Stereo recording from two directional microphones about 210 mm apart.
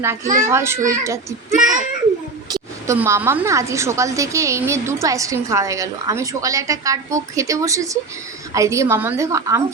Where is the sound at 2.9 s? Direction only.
10° right (ahead or behind).